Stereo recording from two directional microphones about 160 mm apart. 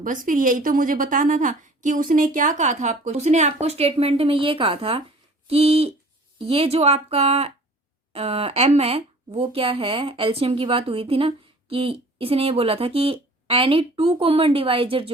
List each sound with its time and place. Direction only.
0.0 s a woman's voice: 55° right (ahead or behind); by 15.1 s 35° right (ahead or behind)